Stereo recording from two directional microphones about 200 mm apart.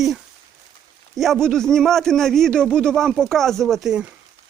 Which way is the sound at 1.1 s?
Centre (ahead or behind).